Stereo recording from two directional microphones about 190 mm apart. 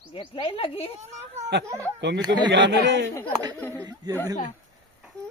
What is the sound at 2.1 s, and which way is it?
Speech, 20° right (ahead or behind).